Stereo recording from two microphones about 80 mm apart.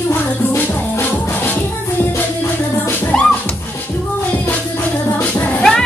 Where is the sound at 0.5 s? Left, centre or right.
Left.